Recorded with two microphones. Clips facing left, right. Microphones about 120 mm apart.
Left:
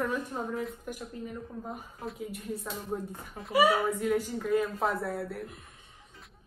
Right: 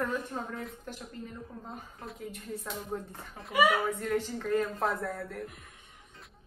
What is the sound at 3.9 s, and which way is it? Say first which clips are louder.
A woman's voice: left 2 dB; 10° left (ahead or behind).